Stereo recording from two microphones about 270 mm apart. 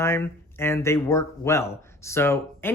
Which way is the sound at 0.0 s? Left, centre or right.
Centre.